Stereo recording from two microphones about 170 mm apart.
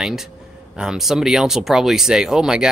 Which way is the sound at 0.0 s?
Centre (ahead or behind).